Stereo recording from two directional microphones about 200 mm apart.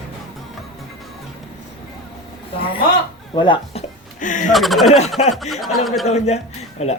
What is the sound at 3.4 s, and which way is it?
Music, 25° left (ahead or behind).